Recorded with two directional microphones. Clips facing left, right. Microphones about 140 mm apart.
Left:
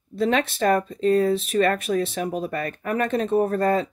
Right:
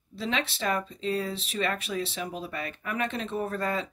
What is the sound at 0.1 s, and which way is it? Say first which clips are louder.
Speech: left 9 dB; 50° left (ahead or behind).